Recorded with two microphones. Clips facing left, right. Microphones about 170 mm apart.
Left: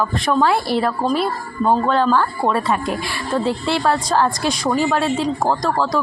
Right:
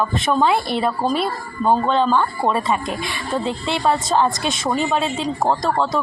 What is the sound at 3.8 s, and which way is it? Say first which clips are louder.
Speech: right 2 dB; 20° right (ahead or behind).